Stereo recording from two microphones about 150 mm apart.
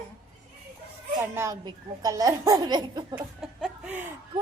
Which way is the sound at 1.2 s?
20° right (ahead or behind).